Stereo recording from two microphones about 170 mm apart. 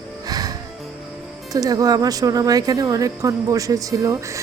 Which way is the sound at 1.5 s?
20° right (ahead or behind).